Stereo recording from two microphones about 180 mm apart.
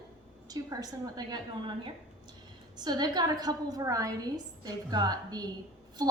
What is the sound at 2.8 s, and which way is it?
A woman's voice, 25° right (ahead or behind).